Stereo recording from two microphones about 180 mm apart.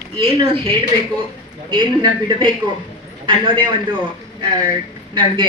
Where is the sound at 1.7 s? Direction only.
25° right (ahead or behind).